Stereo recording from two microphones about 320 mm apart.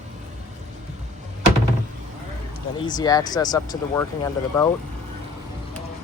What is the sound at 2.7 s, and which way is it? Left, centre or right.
Speech, centre.